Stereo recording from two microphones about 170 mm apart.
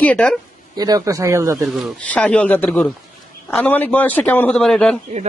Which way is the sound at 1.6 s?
Centre (ahead or behind).